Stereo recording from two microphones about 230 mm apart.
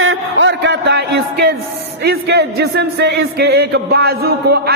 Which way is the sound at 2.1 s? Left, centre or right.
Right.